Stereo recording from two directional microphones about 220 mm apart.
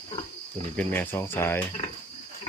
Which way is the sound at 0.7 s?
10° left (ahead or behind).